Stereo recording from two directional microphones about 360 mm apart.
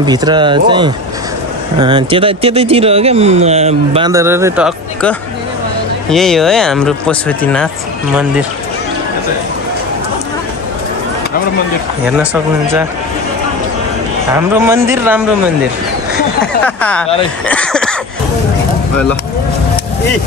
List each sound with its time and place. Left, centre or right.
0.0 s speech: centre
14.3 s speech: centre
16.6 s speech: centre